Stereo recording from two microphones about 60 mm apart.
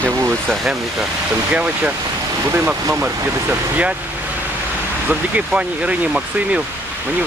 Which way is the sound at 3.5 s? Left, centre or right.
Right.